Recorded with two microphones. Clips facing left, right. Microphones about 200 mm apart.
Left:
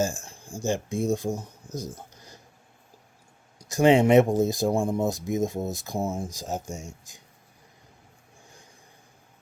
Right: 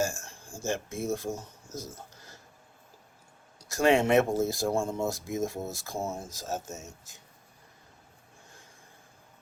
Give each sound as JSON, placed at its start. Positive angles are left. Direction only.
{"t": 0.0, "sound": "speech", "side_deg": 15}
{"t": 3.6, "sound": "speech", "side_deg": 15}